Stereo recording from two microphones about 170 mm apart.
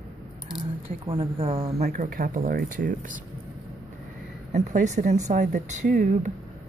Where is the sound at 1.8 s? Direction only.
55° right (ahead or behind).